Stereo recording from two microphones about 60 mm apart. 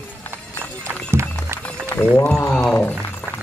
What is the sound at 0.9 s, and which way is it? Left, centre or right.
Music, right.